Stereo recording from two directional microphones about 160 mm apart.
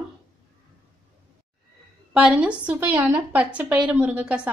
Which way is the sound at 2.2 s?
5° right (ahead or behind).